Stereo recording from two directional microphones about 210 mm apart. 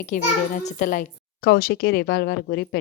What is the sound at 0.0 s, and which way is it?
Speech, 35° left (ahead or behind).